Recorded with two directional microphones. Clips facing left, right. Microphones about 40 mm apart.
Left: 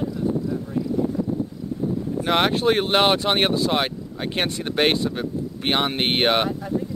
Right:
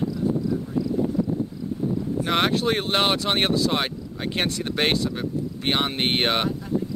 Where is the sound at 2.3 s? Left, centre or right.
Centre.